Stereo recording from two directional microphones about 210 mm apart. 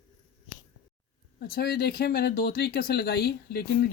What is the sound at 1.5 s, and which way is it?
Speech, 45° left (ahead or behind).